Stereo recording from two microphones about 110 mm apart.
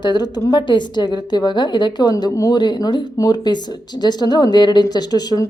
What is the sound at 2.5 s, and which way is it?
A woman's voice, 40° left (ahead or behind).